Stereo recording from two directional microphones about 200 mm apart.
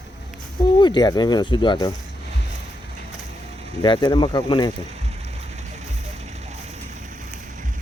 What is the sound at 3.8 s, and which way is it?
Speech, 20° left (ahead or behind).